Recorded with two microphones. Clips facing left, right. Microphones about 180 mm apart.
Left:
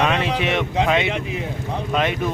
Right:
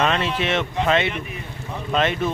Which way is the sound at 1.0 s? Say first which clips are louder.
Left 4 dB; 90° left.